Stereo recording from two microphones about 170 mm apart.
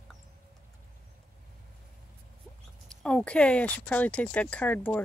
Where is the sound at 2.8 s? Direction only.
5° left (ahead or behind).